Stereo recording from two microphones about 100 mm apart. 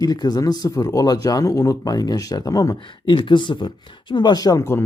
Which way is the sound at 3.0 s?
55° left (ahead or behind).